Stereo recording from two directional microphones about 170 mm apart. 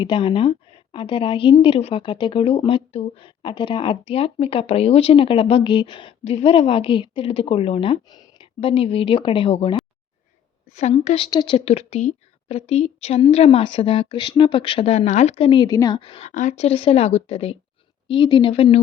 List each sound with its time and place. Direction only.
0.0 s a woman's voice: 30° left (ahead or behind)
10.8 s a woman's voice: 40° left (ahead or behind); by 16.0 s 20° left (ahead or behind)
16.0 s a woman's voice: 35° left (ahead or behind)